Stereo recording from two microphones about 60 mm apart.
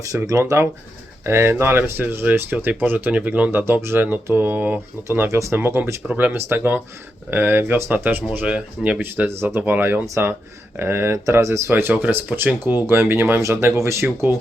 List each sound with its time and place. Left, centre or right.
0.3 s speech: right
1.2 s speech: right
3.5 s speech: right
5.3 s speech: right
5.5 s speech: right
6.1 s speech: right
8.4 s speech: centre
9.0 s speech: right
9.6 s speech: right
11.7 s speech: right